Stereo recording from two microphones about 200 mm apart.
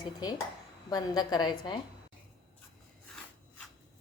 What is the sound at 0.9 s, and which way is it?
Speech, 20° left (ahead or behind).